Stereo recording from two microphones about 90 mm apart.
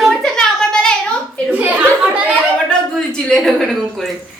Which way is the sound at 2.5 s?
10° left (ahead or behind).